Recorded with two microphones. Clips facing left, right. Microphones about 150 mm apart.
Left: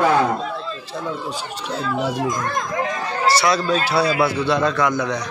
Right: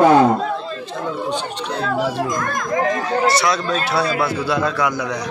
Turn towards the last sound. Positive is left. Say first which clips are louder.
# left 1 dB
turn(degrees=-5)  # may be behind; listen again after turning